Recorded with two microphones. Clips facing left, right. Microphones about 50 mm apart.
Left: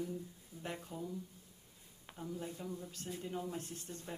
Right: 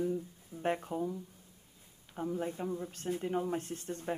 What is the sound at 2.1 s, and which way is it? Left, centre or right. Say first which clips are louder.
Speech: right 8 dB; right.